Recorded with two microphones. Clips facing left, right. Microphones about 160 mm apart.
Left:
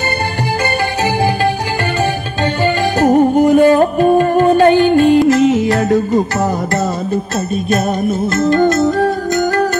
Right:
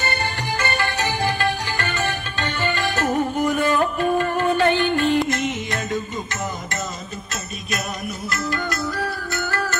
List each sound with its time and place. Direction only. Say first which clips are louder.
2.6 s music: left 10 dB; 40° left (ahead or behind)
5.8 s music: left 14 dB; 70° left (ahead or behind)